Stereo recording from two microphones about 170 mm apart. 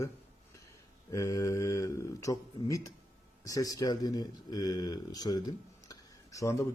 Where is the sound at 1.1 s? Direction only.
20° left (ahead or behind).